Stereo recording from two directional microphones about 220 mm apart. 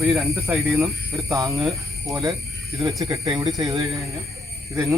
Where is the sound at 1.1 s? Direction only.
15° right (ahead or behind).